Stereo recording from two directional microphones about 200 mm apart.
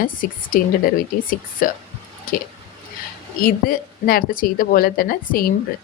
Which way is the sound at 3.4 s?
45° left (ahead or behind).